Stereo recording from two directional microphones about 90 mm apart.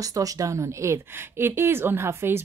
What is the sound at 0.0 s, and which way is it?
Speech, 40° right (ahead or behind).